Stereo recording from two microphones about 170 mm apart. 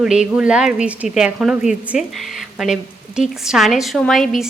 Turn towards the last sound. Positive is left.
turn(degrees=0)  # may be behind; listen again after turning